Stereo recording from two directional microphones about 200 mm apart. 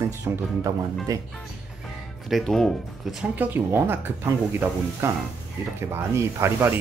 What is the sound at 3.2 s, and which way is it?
Speech, 10° right (ahead or behind).